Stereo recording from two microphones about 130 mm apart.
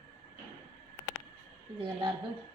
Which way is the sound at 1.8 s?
40° right (ahead or behind).